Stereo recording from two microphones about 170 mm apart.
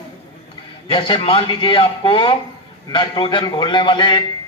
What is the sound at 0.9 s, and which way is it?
A man's voice, 30° left (ahead or behind).